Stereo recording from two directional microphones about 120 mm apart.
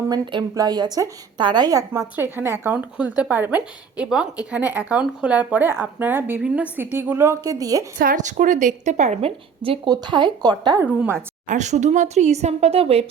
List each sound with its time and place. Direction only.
0.1 s a woman's voice: 35° right (ahead or behind)
1.9 s speech: 20° right (ahead or behind)
8.1 s speech: 90° right
9.6 s a woman's voice: 40° right (ahead or behind)
11.4 s speech: 85° right; by 13.1 s 55° right (ahead or behind)